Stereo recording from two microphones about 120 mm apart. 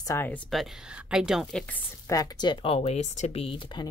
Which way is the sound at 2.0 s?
35° left (ahead or behind).